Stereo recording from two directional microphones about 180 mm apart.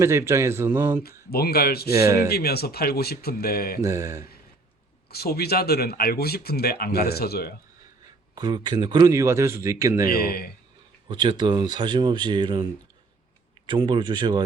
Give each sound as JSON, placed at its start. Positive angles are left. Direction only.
{"t": 0.0, "sound": "speech", "side_deg": -15}
{"t": 1.0, "sound": "speech", "side_deg": 60}
{"t": 1.9, "sound": "speech", "side_deg": -15}
{"t": 2.3, "sound": "speech", "side_deg": 60}
{"t": 3.8, "sound": "speech", "side_deg": -20}
{"t": 5.0, "sound": "speech", "side_deg": 60}
{"t": 8.4, "sound": "speech", "side_deg": -25}
{"t": 10.1, "sound": "speech", "side_deg": 60}
{"t": 11.1, "sound": "speech", "side_deg": -25}